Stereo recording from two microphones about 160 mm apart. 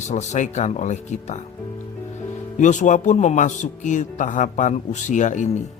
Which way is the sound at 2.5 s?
50° left (ahead or behind).